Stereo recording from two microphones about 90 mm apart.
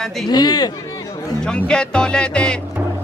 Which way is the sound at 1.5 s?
10° left (ahead or behind).